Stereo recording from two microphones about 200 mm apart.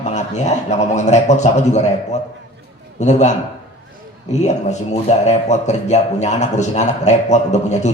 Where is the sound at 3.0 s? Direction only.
35° left (ahead or behind).